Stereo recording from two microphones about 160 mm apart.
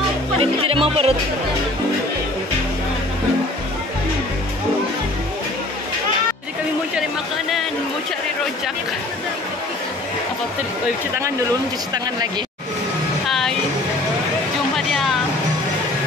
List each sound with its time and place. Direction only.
0.4 s speech: 35° right (ahead or behind)
13.3 s music: 5° left (ahead or behind)